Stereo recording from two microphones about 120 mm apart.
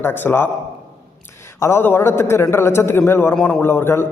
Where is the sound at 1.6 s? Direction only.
20° left (ahead or behind).